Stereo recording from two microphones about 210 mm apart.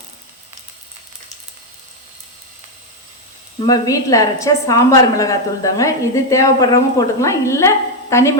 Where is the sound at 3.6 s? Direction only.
20° left (ahead or behind).